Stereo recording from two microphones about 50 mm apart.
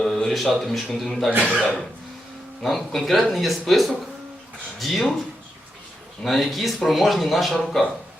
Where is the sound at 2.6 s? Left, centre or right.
Centre.